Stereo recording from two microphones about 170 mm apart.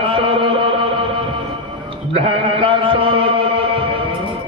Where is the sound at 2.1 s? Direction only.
35° right (ahead or behind).